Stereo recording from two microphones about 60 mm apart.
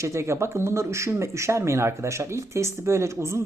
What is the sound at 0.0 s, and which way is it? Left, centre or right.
Speech, right.